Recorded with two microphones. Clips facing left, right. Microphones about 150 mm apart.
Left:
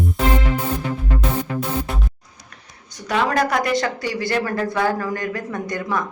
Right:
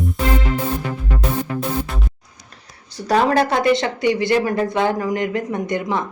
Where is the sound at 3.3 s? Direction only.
25° right (ahead or behind).